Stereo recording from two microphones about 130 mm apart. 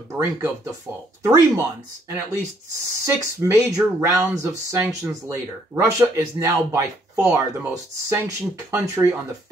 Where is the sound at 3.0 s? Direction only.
20° right (ahead or behind).